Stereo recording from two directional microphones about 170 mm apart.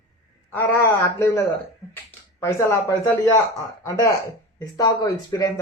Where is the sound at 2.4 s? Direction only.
15° left (ahead or behind).